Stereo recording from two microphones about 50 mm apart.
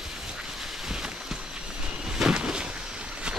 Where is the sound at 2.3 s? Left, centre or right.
Centre.